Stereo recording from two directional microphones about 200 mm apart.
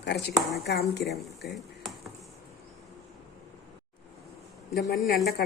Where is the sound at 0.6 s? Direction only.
55° left (ahead or behind).